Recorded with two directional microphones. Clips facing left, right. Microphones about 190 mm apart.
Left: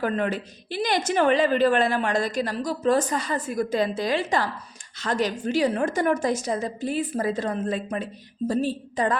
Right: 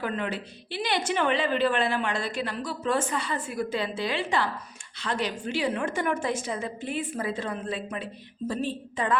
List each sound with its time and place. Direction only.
0.0 s a woman's voice: 45° left (ahead or behind)